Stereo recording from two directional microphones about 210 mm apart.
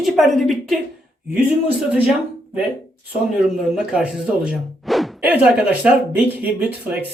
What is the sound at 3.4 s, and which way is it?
Speech, 5° right (ahead or behind).